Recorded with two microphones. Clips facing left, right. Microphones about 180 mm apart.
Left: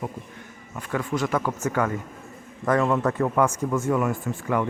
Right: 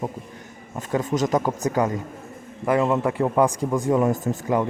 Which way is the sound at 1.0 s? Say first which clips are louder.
Right 3 dB; 40° right (ahead or behind).